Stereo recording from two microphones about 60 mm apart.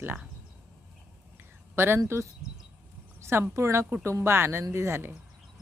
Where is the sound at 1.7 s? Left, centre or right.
Right.